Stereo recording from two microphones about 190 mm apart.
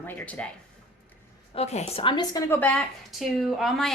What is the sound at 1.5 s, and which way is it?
A woman's voice, 35° left (ahead or behind).